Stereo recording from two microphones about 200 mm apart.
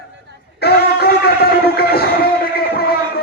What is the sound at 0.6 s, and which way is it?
Music, 50° left (ahead or behind).